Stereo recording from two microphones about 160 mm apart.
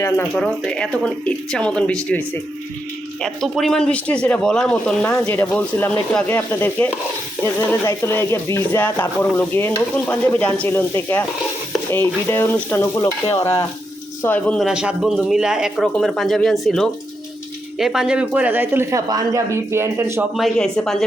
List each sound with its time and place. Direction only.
0.0 s speech: 5° left (ahead or behind)
14.7 s speech: 5° right (ahead or behind)
20.3 s speech: centre (ahead or behind)